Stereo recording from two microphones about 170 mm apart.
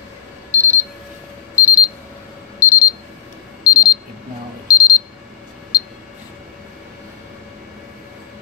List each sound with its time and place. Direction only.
0.5 s alarm clock: 45° right (ahead or behind)
1.5 s alarm clock: 10° right (ahead or behind)
2.6 s alarm clock: 15° left (ahead or behind)
5.7 s a sound: 20° left (ahead or behind)